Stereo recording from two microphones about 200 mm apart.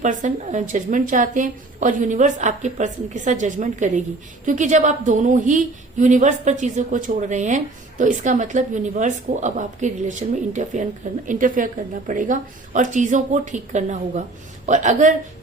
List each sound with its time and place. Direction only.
0.0 s a woman's voice: 40° right (ahead or behind)